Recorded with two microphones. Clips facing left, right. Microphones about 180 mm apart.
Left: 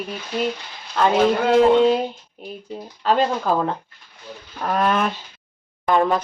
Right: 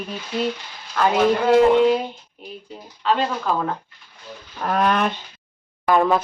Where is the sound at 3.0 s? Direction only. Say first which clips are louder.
Left 1 dB; 40° left (ahead or behind).